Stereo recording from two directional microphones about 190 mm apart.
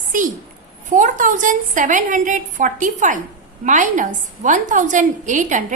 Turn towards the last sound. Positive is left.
turn(degrees=-40)  # may be behind; listen again after turning